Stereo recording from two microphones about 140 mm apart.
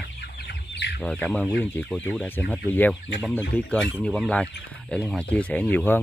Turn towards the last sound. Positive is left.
turn(degrees=15)  # may be behind; listen again after turning